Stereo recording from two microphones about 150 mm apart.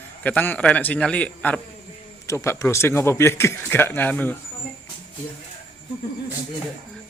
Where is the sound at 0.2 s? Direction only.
10° left (ahead or behind).